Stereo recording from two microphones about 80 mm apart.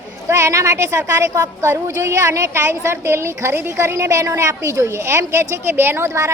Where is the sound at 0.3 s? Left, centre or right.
Right.